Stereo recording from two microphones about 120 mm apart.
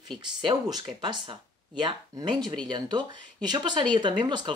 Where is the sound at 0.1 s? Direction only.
40° right (ahead or behind).